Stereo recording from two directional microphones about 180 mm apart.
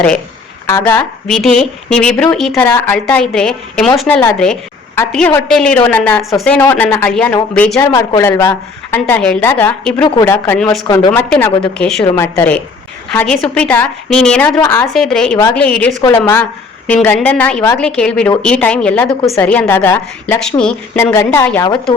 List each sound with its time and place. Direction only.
0.7 s a woman's voice: 15° left (ahead or behind)
7.9 s a woman's voice: 20° left (ahead or behind)
10.8 s speech: 25° left (ahead or behind)
11.1 s a woman's voice: 10° left (ahead or behind)
14.6 s speech: 20° left (ahead or behind)
14.9 s a woman's voice: 5° left (ahead or behind)